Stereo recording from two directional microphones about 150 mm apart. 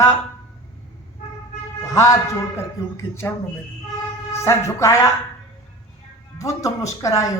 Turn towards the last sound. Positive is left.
turn(degrees=25)  # may be behind; listen again after turning